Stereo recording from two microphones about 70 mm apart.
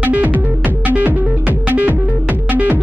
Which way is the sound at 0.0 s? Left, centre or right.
Right.